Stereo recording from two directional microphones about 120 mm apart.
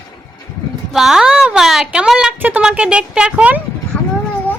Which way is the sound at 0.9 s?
5° right (ahead or behind).